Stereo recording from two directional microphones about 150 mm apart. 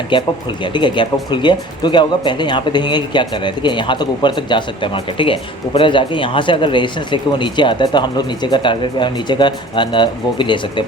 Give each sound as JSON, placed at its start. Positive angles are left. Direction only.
{"t": 0.1, "sound": "speech", "side_deg": 35}